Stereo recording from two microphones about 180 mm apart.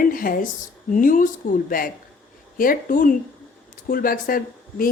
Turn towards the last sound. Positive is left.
turn(degrees=50)  # may be behind; listen again after turning